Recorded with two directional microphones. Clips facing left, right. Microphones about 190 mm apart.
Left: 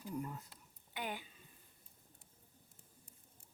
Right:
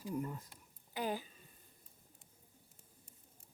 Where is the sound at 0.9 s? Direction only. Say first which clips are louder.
Right 5 dB; 35° right (ahead or behind).